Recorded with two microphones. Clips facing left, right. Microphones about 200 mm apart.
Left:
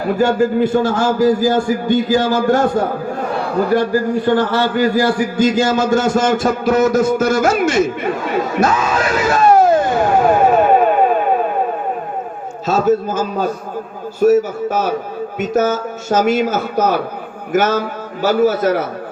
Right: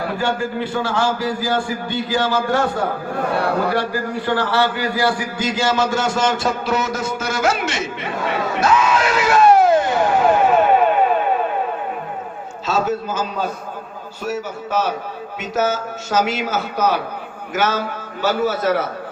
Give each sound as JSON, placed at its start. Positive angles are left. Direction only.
{"t": 0.2, "sound": "a man's voice", "side_deg": 45}
{"t": 8.5, "sound": "music", "side_deg": 45}
{"t": 14.3, "sound": "a man's voice", "side_deg": 50}